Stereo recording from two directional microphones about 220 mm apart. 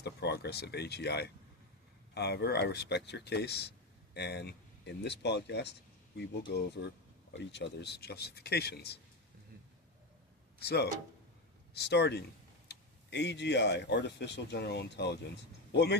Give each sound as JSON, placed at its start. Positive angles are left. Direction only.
{"t": 0.0, "sound": "speech", "side_deg": 50}
{"t": 10.6, "sound": "speech", "side_deg": 50}